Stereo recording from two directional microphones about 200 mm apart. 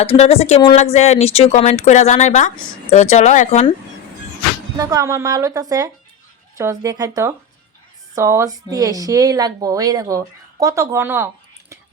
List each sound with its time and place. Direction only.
0.0 s a woman's voice: 30° left (ahead or behind)
4.8 s speech: 15° right (ahead or behind)